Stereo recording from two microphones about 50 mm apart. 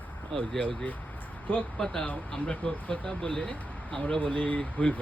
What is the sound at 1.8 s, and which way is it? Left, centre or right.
Speech, left.